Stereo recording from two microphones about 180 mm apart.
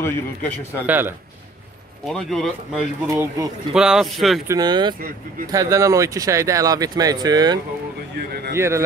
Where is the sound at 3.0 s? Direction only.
15° right (ahead or behind).